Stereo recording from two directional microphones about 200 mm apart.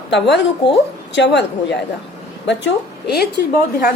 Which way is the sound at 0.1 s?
60° left (ahead or behind).